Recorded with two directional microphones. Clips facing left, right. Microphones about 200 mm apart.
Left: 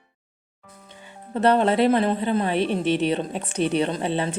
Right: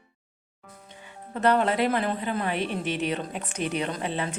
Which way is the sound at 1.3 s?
30° left (ahead or behind).